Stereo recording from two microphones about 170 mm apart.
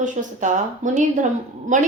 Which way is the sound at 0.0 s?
45° right (ahead or behind).